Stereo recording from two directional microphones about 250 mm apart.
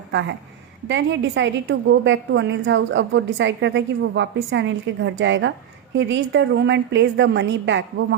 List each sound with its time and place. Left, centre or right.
0.1 s a woman's voice: right